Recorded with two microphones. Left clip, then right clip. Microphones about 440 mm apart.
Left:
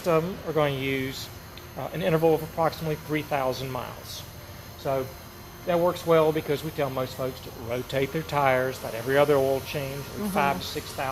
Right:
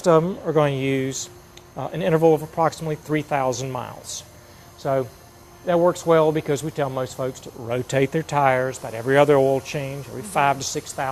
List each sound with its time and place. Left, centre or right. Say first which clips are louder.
0.0 s speech: right 7 dB; right
4.8 s speech: right 5 dB; right
7.7 s speech: right 6 dB; right